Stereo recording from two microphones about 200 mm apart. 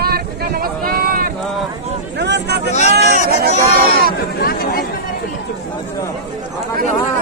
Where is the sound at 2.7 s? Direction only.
35° left (ahead or behind).